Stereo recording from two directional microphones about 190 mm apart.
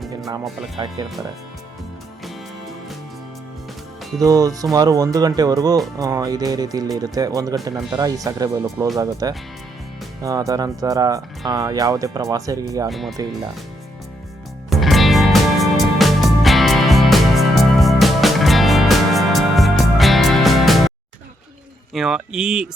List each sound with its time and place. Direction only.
0.8 s speech: 20° right (ahead or behind)
4.2 s speech: 20° right (ahead or behind)
12.9 s speech: centre (ahead or behind)
14.7 s music: centre (ahead or behind)
21.9 s speech: 5° right (ahead or behind)